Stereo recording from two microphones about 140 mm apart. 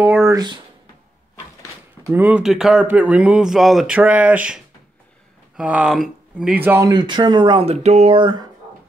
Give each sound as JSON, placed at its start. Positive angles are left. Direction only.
{"t": 0.0, "sound": "speech", "side_deg": -15}
{"t": 2.0, "sound": "speech", "side_deg": -15}
{"t": 6.9, "sound": "speech", "side_deg": -30}
{"t": 7.6, "sound": "a sound", "side_deg": -50}
{"t": 8.2, "sound": "speech", "side_deg": -30}